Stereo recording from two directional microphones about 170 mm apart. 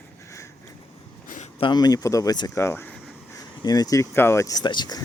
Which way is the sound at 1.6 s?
25° left (ahead or behind).